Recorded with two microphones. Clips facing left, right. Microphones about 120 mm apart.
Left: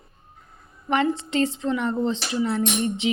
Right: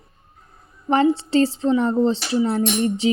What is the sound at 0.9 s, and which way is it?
Speech, 35° right (ahead or behind).